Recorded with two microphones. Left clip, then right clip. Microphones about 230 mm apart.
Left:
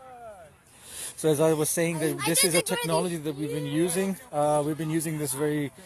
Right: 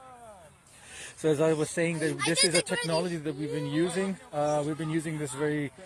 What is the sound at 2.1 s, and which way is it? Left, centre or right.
Speech, left.